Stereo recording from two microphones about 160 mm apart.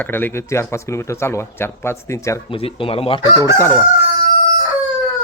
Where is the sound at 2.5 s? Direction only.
35° left (ahead or behind).